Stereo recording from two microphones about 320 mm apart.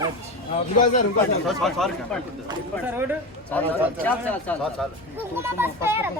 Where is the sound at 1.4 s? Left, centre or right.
Centre.